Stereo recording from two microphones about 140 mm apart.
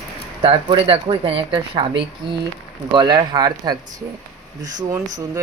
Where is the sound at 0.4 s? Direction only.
40° right (ahead or behind).